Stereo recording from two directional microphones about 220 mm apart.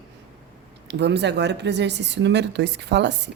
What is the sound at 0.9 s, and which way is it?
A woman's voice, 50° right (ahead or behind).